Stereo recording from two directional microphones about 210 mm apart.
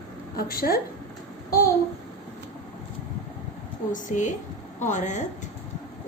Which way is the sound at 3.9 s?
35° left (ahead or behind).